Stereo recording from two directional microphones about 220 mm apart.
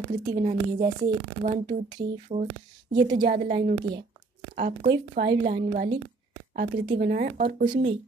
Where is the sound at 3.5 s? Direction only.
20° right (ahead or behind).